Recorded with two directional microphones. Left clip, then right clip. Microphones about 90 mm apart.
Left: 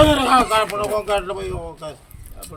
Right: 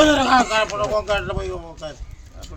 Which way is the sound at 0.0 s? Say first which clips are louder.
Left 1 dB; 20° right (ahead or behind).